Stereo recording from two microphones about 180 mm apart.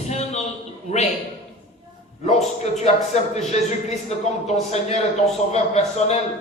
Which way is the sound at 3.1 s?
40° left (ahead or behind).